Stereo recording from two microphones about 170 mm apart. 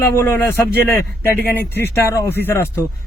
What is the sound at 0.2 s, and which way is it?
Speech, 15° left (ahead or behind).